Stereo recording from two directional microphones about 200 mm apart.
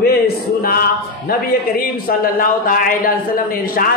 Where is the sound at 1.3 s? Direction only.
45° left (ahead or behind).